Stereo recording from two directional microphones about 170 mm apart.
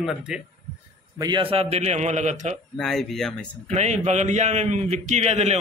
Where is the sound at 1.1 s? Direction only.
25° right (ahead or behind); by 2.6 s 45° right (ahead or behind).